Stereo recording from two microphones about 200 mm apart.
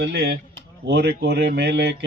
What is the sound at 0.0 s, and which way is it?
A man's voice, 55° right (ahead or behind).